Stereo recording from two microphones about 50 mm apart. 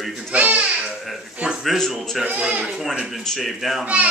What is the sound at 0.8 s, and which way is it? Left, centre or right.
Babbling, centre.